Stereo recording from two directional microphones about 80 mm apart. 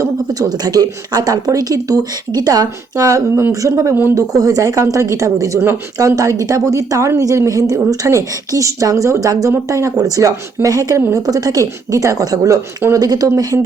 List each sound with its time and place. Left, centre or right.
0.0 s speech: right